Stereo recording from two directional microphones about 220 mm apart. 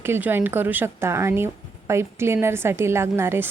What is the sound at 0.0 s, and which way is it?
A woman's voice, 10° right (ahead or behind).